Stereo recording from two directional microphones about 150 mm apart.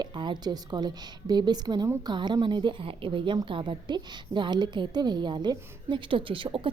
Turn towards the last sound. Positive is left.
turn(degrees=-35)  # may be behind; listen again after turning